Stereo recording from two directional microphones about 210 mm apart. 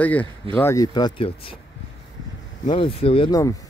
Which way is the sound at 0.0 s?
5° left (ahead or behind).